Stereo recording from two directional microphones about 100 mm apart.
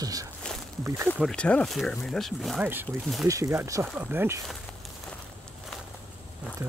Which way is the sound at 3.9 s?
20° right (ahead or behind).